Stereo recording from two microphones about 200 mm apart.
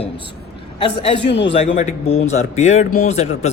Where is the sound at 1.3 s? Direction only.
65° left (ahead or behind).